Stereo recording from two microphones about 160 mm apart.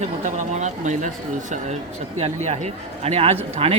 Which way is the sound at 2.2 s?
45° right (ahead or behind).